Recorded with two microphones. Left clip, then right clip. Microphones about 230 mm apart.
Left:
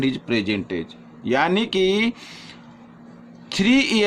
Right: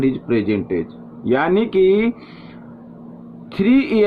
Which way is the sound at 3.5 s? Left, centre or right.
Left.